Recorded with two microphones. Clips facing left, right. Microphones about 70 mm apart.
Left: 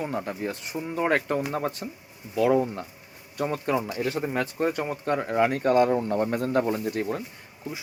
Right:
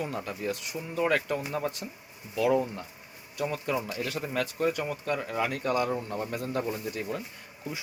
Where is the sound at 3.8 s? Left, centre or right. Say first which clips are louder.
Left 5 dB; left.